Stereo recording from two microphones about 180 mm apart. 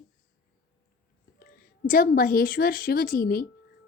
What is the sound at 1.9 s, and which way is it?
Female singing, 50° left (ahead or behind).